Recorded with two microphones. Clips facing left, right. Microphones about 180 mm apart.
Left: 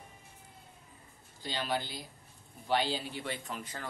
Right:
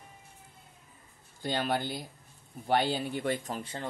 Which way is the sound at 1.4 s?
50° right (ahead or behind).